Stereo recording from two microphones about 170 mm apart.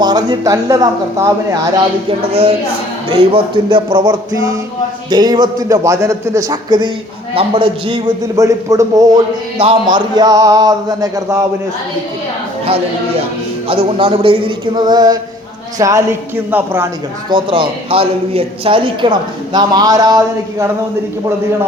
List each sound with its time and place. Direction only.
0.0 s a man's voice: 25° right (ahead or behind)
2.0 s a man's voice: 35° right (ahead or behind)
8.4 s a man's voice: 20° right (ahead or behind)
13.7 s speech: 35° right (ahead or behind); by 16.9 s 10° right (ahead or behind)
17.2 s a man's voice: 30° right (ahead or behind)